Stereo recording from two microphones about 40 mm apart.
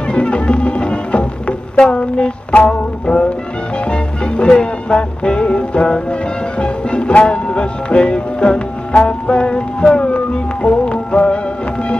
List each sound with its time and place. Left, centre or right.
0.1 s music: left